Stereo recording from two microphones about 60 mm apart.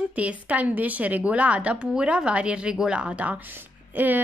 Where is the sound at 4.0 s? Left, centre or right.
Right.